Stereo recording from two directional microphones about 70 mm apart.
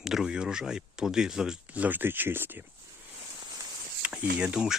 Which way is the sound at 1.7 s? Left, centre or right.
Right.